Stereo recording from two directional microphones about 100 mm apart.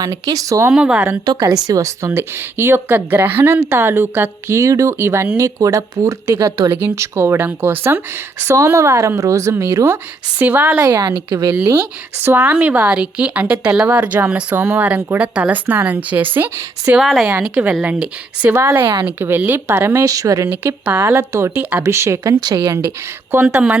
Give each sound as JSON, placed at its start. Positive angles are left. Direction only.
{"t": 0.0, "sound": "speech", "side_deg": -40}
{"t": 0.7, "sound": "speech", "side_deg": -10}
{"t": 1.2, "sound": "speech", "side_deg": -40}
{"t": 10.3, "sound": "speech", "side_deg": -20}
{"t": 10.8, "sound": "speech", "side_deg": -40}
{"t": 12.2, "sound": "speech", "side_deg": -20}
{"t": 17.0, "sound": "speech", "side_deg": 0}
{"t": 21.8, "sound": "speech", "side_deg": -30}
{"t": 23.5, "sound": "speech", "side_deg": -10}